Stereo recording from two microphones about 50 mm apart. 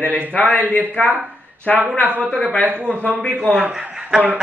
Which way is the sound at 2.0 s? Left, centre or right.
Right.